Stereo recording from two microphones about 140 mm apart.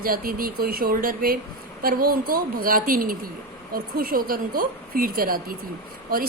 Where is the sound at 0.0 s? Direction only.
90° right.